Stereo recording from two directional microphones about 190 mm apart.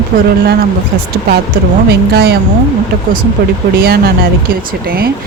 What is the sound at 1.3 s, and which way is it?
Speech, 55° right (ahead or behind).